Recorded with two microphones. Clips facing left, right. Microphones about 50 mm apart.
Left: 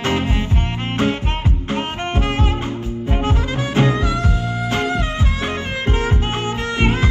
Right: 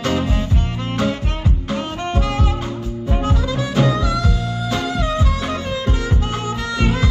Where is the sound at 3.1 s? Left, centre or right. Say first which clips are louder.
Even; left.